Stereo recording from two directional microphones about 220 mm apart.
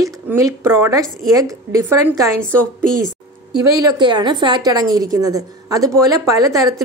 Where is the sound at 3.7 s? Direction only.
15° right (ahead or behind).